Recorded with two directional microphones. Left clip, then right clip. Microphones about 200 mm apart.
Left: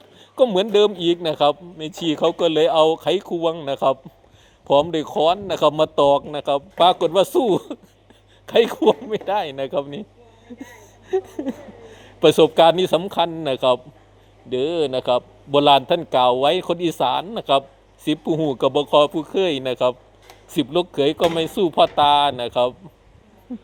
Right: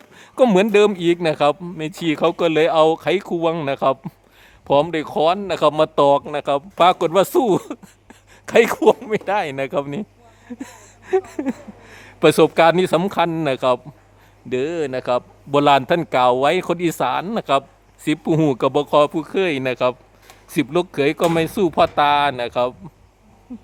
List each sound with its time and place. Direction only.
0.5 s a man's voice: 20° right (ahead or behind)